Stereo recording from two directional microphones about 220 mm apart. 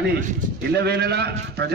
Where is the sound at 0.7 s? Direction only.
50° right (ahead or behind).